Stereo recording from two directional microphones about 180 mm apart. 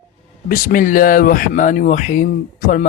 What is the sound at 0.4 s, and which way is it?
Speech, 50° left (ahead or behind).